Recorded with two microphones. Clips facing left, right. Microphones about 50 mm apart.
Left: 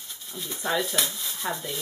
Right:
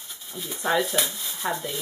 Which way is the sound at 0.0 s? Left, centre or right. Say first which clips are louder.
Right 1 dB; centre.